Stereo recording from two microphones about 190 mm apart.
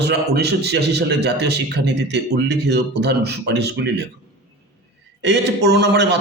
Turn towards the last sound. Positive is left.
turn(degrees=-60)  # may be behind; listen again after turning